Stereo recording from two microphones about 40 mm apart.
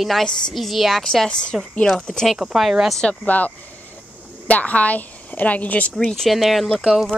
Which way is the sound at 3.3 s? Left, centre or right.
Left.